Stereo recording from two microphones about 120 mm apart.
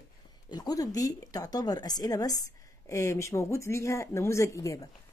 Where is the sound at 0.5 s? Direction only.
30° left (ahead or behind).